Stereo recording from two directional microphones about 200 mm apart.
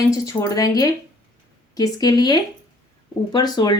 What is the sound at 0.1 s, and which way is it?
Speech, 15° left (ahead or behind).